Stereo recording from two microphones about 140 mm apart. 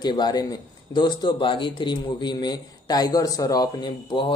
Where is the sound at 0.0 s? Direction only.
30° left (ahead or behind).